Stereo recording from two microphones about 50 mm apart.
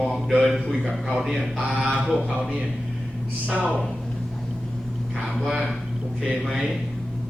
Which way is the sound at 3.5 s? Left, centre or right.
Right.